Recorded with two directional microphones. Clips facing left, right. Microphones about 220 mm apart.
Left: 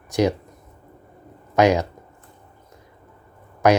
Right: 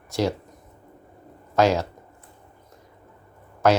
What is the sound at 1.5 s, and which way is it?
Speech, 15° left (ahead or behind).